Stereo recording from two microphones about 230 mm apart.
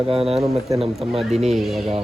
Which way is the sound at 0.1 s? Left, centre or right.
Right.